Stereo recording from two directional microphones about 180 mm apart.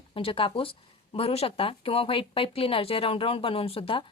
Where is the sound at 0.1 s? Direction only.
30° left (ahead or behind).